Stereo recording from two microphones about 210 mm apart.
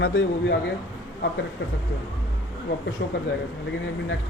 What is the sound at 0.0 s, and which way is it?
Speech, 65° left (ahead or behind).